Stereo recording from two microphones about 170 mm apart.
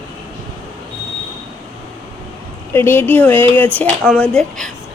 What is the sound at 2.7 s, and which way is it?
Speech, 15° left (ahead or behind).